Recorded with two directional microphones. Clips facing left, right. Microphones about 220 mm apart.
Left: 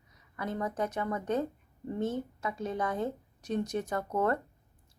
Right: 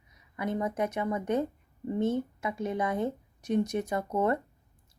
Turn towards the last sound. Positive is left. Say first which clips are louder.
# right 2 dB
turn(degrees=-15)  # may be behind; listen again after turning